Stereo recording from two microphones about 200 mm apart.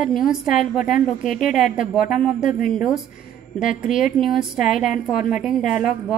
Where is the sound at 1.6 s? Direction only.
40° left (ahead or behind).